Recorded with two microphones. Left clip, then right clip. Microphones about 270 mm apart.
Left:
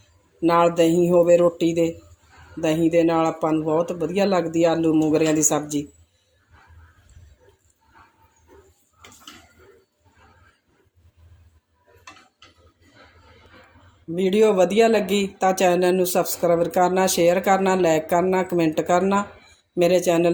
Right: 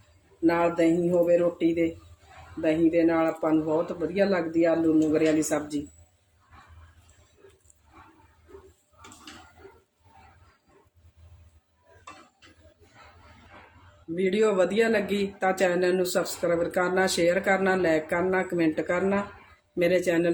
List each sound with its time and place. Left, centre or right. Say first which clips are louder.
0.4 s speech: left 6 dB; left
14.2 s speech: left 6 dB; centre